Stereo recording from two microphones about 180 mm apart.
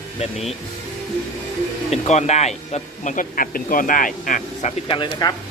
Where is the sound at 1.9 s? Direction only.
40° left (ahead or behind).